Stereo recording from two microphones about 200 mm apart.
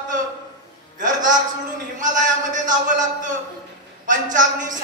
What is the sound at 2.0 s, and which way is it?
A man's voice, 40° right (ahead or behind).